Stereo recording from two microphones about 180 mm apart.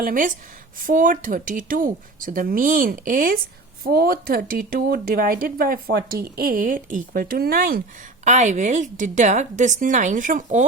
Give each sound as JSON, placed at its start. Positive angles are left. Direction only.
{"t": 0.0, "sound": "speech", "side_deg": -50}
{"t": 8.2, "sound": "speech", "side_deg": -40}